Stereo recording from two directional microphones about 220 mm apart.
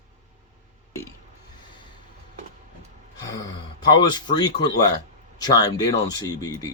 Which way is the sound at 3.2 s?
15° left (ahead or behind).